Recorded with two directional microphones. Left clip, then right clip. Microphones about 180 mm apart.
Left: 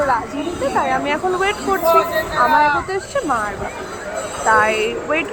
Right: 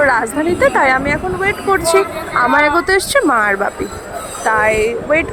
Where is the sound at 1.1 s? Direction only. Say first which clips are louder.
Right 2 dB; centre (ahead or behind).